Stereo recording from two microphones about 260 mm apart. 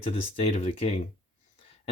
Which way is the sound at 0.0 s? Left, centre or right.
Left.